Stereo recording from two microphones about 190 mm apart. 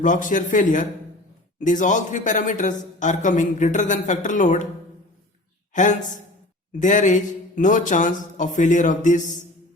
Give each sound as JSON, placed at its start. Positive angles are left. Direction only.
{"t": 0.0, "sound": "a man's voice", "side_deg": 45}
{"t": 5.7, "sound": "a man's voice", "side_deg": 40}